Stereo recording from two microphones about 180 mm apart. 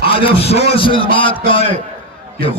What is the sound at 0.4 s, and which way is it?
A man's voice, 35° left (ahead or behind).